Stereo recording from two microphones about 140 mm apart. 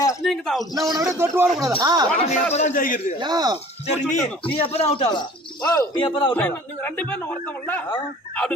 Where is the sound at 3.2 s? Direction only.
30° right (ahead or behind).